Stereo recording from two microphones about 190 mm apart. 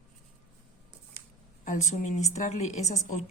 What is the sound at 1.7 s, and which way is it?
Speech, 40° left (ahead or behind).